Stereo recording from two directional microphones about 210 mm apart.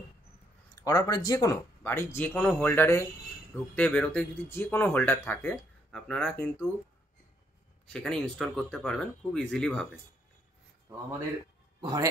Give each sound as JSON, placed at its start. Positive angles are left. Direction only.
{"t": 0.7, "sound": "speech", "side_deg": 15}
{"t": 7.9, "sound": "speech", "side_deg": 5}
{"t": 11.8, "sound": "a man's voice", "side_deg": -15}